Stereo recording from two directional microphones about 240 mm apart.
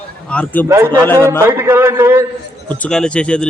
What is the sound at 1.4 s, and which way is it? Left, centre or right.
Speech, centre.